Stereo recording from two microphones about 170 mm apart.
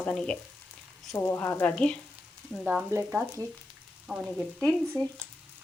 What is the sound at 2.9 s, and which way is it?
Speech, 5° right (ahead or behind).